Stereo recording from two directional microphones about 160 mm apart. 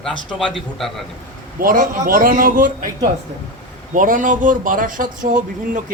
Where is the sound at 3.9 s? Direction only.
55° right (ahead or behind).